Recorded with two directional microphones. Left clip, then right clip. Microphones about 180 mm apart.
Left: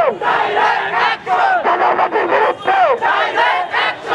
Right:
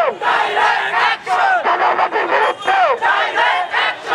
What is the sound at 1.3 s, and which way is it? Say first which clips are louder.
Battle cry: left 2 dB; 10° left (ahead or behind).